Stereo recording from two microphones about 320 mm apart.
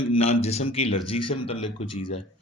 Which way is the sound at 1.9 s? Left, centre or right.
Left.